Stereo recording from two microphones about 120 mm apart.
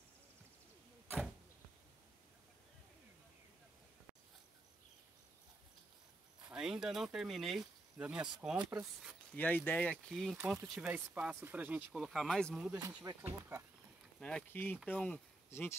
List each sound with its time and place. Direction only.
6.4 s speech: 5° right (ahead or behind)
9.3 s speech: 15° left (ahead or behind)
10.4 s speech: 15° right (ahead or behind); by 12.5 s 5° left (ahead or behind)
12.5 s speech: 10° right (ahead or behind)
12.8 s speech: 30° right (ahead or behind)
14.2 s speech: 10° left (ahead or behind)